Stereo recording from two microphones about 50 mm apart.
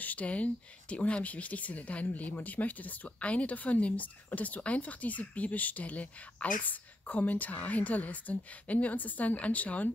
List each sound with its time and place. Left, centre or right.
0.0 s speech: left